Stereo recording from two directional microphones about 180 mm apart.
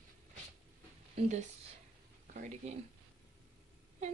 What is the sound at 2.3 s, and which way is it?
Speech, 45° right (ahead or behind).